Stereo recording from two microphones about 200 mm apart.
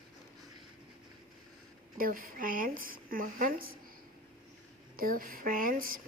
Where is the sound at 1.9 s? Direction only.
45° right (ahead or behind).